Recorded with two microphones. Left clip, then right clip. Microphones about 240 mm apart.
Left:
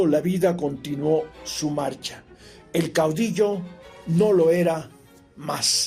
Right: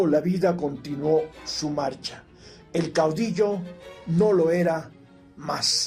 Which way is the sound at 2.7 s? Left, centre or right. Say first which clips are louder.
Left 1 dB; left.